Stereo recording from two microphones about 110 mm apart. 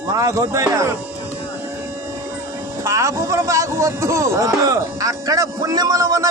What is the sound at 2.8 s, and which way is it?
Speech, 25° right (ahead or behind).